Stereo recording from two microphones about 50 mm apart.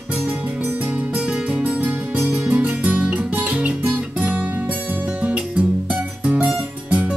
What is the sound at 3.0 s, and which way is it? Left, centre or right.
Music, centre.